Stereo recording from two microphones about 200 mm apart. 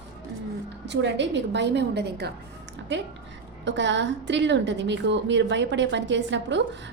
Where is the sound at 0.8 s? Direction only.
60° right (ahead or behind).